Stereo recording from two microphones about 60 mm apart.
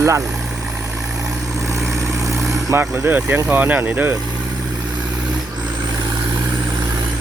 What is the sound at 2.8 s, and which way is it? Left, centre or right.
Speech, right.